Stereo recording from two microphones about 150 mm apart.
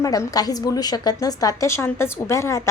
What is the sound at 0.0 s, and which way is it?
A woman's voice, 25° left (ahead or behind).